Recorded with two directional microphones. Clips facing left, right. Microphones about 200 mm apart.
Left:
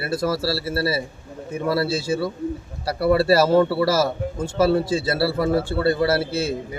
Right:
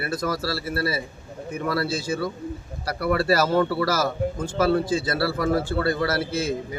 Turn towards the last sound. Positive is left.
turn(degrees=30)  # may be behind; listen again after turning